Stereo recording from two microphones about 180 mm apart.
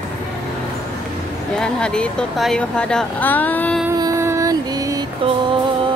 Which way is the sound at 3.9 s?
20° right (ahead or behind).